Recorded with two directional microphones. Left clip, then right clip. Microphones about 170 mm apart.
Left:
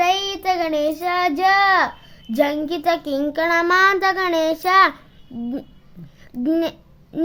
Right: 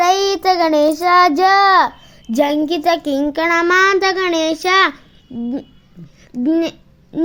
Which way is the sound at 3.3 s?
10° right (ahead or behind).